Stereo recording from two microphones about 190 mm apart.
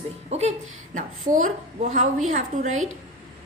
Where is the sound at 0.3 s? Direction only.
35° right (ahead or behind).